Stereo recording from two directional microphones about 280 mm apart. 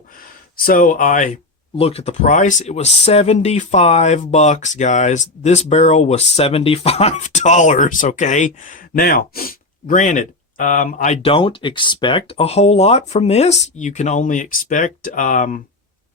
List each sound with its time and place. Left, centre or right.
0.2 s speech: left